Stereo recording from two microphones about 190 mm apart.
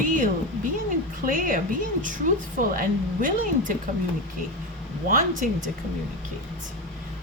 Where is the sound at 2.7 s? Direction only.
45° right (ahead or behind).